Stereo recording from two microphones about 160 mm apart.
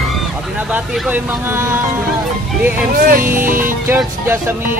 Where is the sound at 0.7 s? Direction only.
5° right (ahead or behind).